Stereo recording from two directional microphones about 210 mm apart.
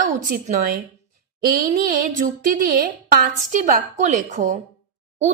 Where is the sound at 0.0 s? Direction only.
40° right (ahead or behind).